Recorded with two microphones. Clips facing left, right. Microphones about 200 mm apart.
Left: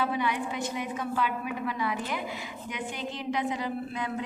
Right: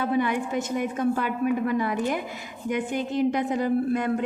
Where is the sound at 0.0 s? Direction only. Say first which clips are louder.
Right 5 dB; 50° right (ahead or behind).